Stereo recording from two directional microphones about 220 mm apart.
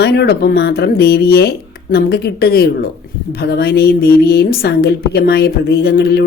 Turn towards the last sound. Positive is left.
turn(degrees=45)  # may be behind; listen again after turning